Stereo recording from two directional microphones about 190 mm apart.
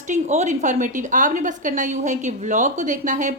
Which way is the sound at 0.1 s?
40° right (ahead or behind).